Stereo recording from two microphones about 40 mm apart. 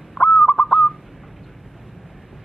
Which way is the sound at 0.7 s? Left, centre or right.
Centre.